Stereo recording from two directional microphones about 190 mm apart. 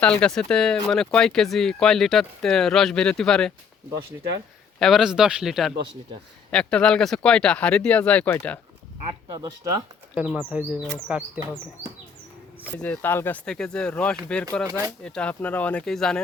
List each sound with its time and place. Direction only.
0.0 s speech: 5° left (ahead or behind)
4.8 s speech: centre (ahead or behind)
9.3 s speech: 20° right (ahead or behind)
10.2 s speech: 10° right (ahead or behind)
12.6 s speech: 10° left (ahead or behind)